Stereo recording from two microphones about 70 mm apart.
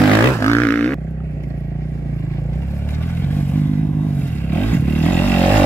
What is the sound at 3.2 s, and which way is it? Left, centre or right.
Vehicle, left.